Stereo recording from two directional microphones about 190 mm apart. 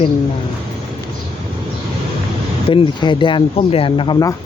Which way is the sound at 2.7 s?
25° left (ahead or behind).